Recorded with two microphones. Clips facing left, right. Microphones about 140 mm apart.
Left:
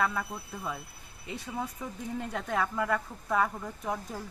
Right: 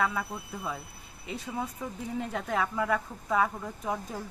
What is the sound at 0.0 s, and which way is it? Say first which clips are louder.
Speech: right 1 dB; 5° right (ahead or behind).